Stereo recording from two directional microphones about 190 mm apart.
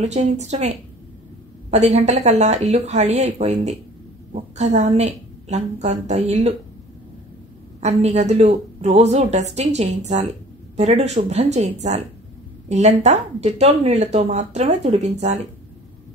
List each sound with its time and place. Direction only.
0.0 s speech: 35° right (ahead or behind)
1.7 s speech: 35° right (ahead or behind)
7.8 s speech: 35° right (ahead or behind)